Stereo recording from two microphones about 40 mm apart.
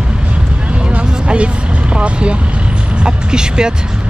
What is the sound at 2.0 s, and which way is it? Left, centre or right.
Vehicle, right.